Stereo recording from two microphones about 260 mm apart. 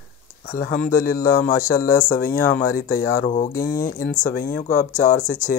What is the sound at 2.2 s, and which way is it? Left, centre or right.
Speech, centre.